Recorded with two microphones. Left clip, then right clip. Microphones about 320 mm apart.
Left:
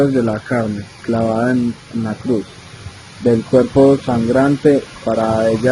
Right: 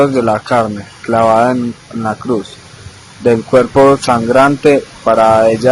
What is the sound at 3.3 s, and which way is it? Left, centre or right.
Speech, right.